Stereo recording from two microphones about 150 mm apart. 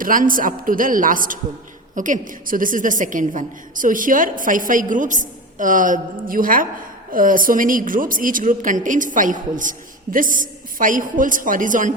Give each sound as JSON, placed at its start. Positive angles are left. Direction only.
{"t": 0.0, "sound": "a woman's voice", "side_deg": -65}